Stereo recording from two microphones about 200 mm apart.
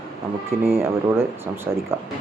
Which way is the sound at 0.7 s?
10° right (ahead or behind).